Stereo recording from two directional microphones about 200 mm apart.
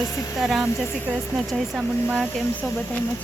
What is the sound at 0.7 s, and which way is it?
Speech, 10° left (ahead or behind).